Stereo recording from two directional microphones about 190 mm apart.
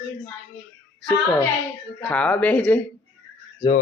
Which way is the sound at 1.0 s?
20° left (ahead or behind).